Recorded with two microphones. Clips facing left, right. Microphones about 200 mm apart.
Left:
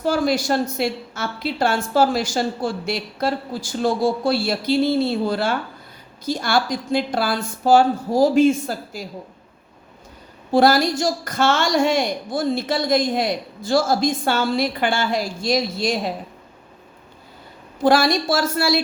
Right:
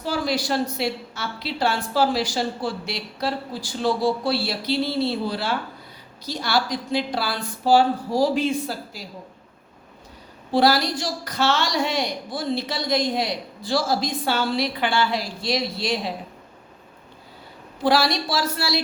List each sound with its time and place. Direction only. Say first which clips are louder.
0.0 s a woman's voice: left 5 dB; 50° left (ahead or behind)
10.5 s a woman's voice: left 4 dB; 50° left (ahead or behind)
17.8 s a woman's voice: left 4 dB; 50° left (ahead or behind)